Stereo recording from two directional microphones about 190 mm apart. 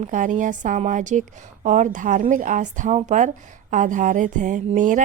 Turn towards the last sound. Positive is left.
turn(degrees=-40)  # may be behind; listen again after turning